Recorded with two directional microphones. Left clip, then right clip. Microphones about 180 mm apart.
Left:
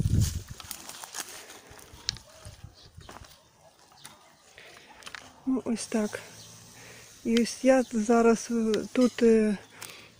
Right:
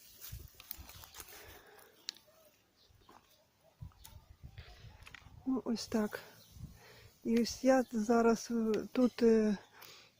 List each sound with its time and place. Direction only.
2.1 s a sound: 30° right (ahead or behind)
5.5 s speech: 20° right (ahead or behind)
7.3 s speech: 15° right (ahead or behind)